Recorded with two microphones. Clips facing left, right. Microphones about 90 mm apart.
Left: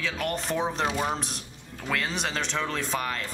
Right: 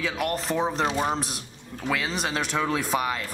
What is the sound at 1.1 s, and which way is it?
Speech, centre (ahead or behind).